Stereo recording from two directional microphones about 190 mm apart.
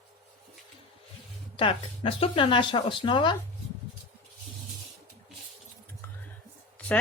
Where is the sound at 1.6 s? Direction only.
30° left (ahead or behind).